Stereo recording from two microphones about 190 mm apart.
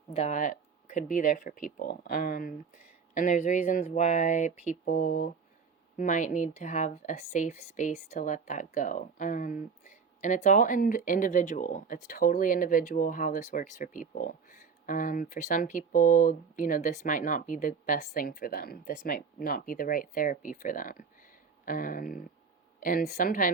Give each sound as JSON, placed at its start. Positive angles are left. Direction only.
{"t": 0.1, "sound": "a woman's voice", "side_deg": 35}